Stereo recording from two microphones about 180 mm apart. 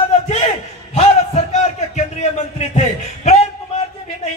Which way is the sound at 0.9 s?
40° left (ahead or behind).